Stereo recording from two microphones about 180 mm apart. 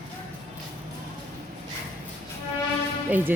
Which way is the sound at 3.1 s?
10° right (ahead or behind).